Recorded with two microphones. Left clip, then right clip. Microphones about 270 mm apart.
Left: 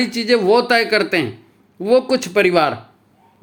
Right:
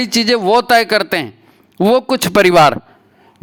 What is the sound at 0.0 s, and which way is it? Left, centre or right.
A man's voice, right.